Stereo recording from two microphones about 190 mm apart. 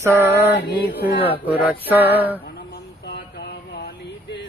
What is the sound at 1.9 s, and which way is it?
Mantra, 10° right (ahead or behind).